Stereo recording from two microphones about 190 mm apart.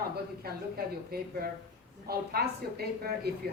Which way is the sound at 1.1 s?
55° right (ahead or behind).